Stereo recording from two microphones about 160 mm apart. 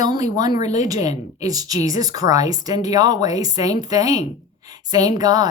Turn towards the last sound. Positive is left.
turn(degrees=-25)  # may be behind; listen again after turning